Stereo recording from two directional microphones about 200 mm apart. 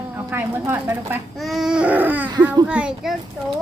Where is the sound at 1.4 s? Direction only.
Centre (ahead or behind).